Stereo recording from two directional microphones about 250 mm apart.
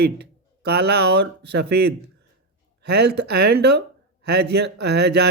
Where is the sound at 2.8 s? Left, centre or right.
Right.